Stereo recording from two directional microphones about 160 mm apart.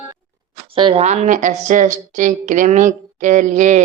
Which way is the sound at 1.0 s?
45° right (ahead or behind).